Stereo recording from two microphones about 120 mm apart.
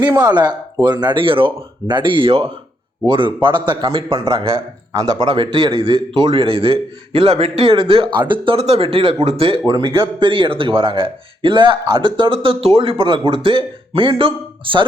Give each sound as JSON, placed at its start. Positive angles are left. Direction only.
{"t": 0.2, "sound": "speech", "side_deg": -35}
{"t": 6.2, "sound": "speech", "side_deg": -50}
{"t": 9.6, "sound": "speech", "side_deg": -40}